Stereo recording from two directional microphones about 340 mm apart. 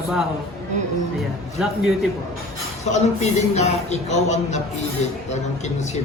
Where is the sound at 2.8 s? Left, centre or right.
Centre.